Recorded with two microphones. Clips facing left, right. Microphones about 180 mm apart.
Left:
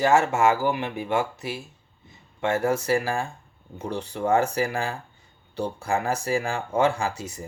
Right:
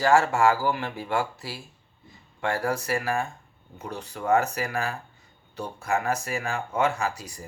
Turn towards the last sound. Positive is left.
turn(degrees=25)  # may be behind; listen again after turning